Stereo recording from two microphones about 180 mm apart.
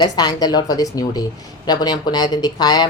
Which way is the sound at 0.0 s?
20° left (ahead or behind).